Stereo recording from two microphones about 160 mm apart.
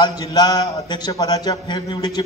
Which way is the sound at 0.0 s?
25° left (ahead or behind).